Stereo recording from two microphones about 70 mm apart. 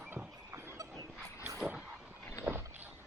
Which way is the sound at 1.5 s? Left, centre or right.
Centre.